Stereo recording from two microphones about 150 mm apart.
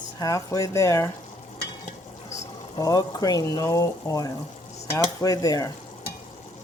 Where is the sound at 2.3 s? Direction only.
25° left (ahead or behind).